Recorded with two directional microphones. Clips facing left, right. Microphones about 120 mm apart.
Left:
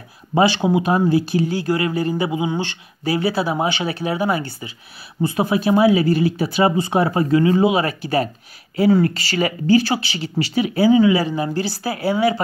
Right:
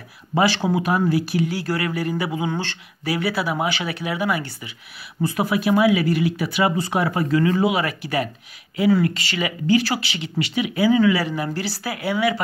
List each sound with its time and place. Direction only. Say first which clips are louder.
0.4 s speech: left 3 dB; 20° left (ahead or behind)
3.1 s speech: left 3 dB; 25° left (ahead or behind)